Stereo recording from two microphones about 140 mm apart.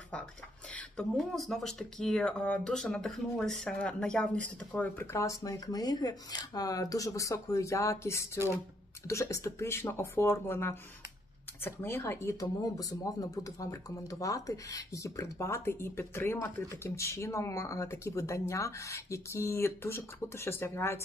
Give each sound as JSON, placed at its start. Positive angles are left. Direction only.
{"t": 0.7, "sound": "speech", "side_deg": 5}